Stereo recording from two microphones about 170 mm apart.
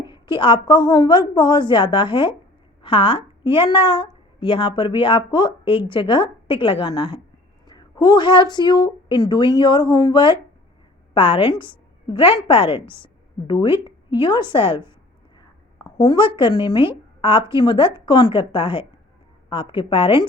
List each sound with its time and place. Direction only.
0.1 s a woman's voice: 25° left (ahead or behind)
14.2 s a woman's voice: 25° left (ahead or behind)
15.4 s a sound: 25° left (ahead or behind)
17.2 s a woman's voice: 30° left (ahead or behind)